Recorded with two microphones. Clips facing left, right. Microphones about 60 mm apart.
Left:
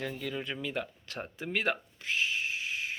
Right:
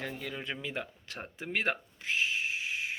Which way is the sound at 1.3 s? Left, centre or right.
Right.